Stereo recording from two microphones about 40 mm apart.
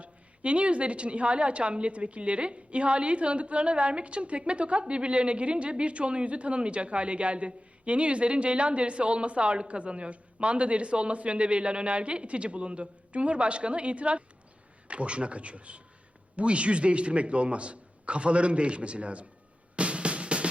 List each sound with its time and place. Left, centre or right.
0.0 s a woman's voice: right
19.7 s music: right